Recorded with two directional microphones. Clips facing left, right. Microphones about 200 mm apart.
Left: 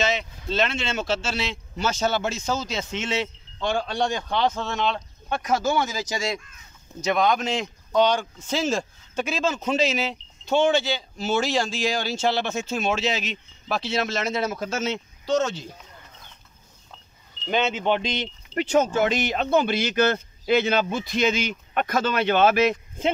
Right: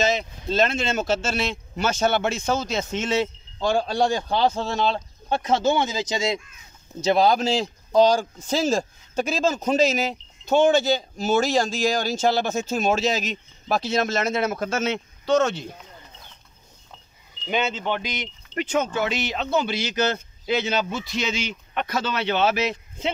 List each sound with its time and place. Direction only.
0.0 s a man's voice: 40° right (ahead or behind); by 15.7 s 60° right (ahead or behind)
17.5 s speech: centre (ahead or behind)
17.7 s a man's voice: 20° left (ahead or behind); by 23.1 s 50° left (ahead or behind)